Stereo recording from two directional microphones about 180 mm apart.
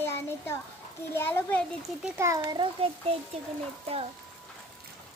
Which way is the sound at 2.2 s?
20° right (ahead or behind).